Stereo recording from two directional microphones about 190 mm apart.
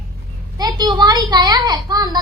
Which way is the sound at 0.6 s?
20° right (ahead or behind).